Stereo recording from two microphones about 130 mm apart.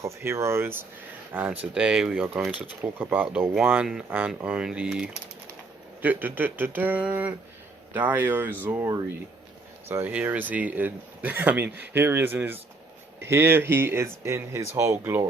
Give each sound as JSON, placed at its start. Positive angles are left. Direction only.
{"t": 0.0, "sound": "speech", "side_deg": -20}